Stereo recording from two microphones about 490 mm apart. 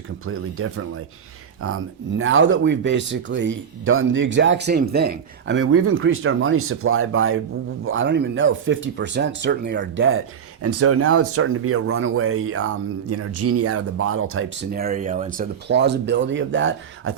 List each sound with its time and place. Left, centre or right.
0.3 s speech: right